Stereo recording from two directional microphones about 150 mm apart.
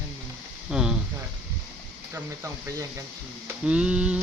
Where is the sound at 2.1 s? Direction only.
20° right (ahead or behind).